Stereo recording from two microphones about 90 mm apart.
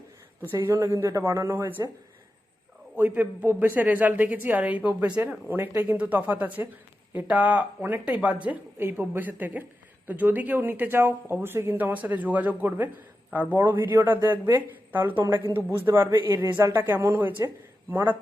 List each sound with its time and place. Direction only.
0.6 s speech: 35° right (ahead or behind)
2.9 s speech: 20° right (ahead or behind)
8.8 s speech: 25° right (ahead or behind)
16.5 s speech: 50° right (ahead or behind)
16.9 s speech: 30° right (ahead or behind)